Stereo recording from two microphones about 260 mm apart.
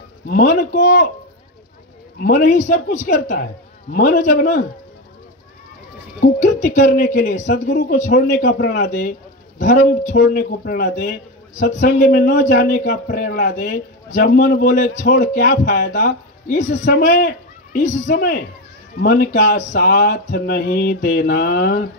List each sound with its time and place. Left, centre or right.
0.3 s a man's voice: left
2.1 s a man's voice: left
6.2 s speech: left
7.7 s a man's voice: left